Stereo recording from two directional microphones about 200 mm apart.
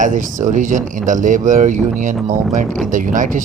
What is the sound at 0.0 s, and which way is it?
Speech, 40° right (ahead or behind).